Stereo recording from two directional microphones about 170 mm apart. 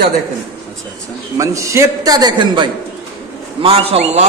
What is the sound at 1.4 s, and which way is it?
A man's voice, 20° right (ahead or behind).